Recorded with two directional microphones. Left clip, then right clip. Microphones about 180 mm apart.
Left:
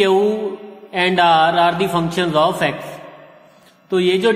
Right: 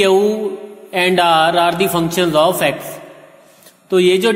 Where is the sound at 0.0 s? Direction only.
20° right (ahead or behind).